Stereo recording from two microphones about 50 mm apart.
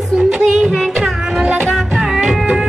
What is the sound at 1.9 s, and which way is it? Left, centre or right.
Music, centre.